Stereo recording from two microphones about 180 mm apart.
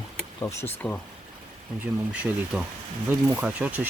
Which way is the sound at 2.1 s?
5° right (ahead or behind).